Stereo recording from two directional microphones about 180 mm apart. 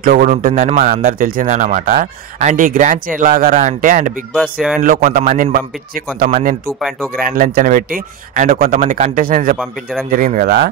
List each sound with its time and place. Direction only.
0.0 s speech: 50° right (ahead or behind)